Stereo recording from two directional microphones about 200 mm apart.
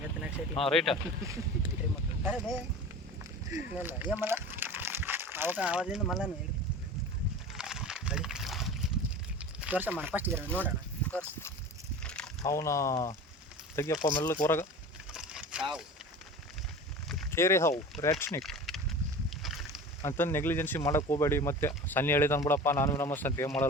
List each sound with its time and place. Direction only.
0.6 s speech: centre (ahead or behind)
1.2 s speech: 15° right (ahead or behind)
2.2 s speech: 5° left (ahead or behind)
3.5 s speech: 10° right (ahead or behind)
7.5 s a sound: 5° right (ahead or behind)
10.0 s speech: 10° right (ahead or behind)
11.1 s speech: 10° left (ahead or behind)
12.0 s a sound: 5° left (ahead or behind)
12.5 s speech: 15° left (ahead or behind)
15.1 s vehicle: 5° right (ahead or behind)
17.3 s speech: 15° left (ahead or behind)
18.4 s a sound: centre (ahead or behind)
20.0 s speech: 10° left (ahead or behind)